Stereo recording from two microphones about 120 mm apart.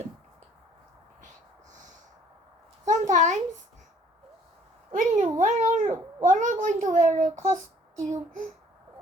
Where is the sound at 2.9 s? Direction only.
90° right.